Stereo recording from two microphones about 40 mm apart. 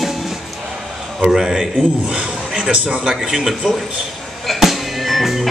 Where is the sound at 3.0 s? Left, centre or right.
Centre.